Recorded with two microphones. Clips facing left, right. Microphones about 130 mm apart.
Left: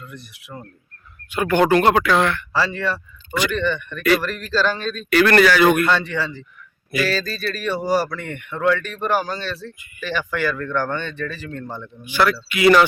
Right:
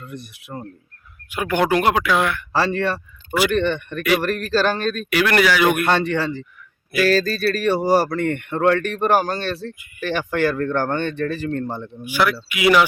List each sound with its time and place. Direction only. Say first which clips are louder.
0.1 s speech: right 4 dB; 50° right (ahead or behind)
1.3 s speech: left 3 dB; 10° right (ahead or behind)
2.5 s speech: right 2 dB; 50° right (ahead or behind)
5.1 s speech: left 4 dB; 10° right (ahead or behind)
5.8 s speech: right 1 dB; 50° right (ahead or behind)
12.0 s speech: left 1 dB; 10° right (ahead or behind)